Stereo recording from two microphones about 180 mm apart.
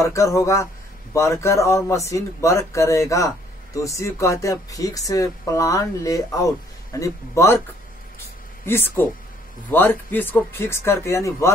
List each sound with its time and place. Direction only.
0.0 s speech: 15° left (ahead or behind)
8.6 s speech: 10° left (ahead or behind)